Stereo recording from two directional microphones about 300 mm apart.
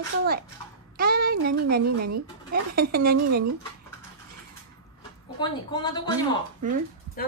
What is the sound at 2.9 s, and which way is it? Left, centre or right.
Speech, right.